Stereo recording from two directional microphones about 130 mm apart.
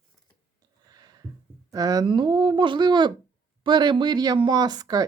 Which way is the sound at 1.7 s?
30° right (ahead or behind).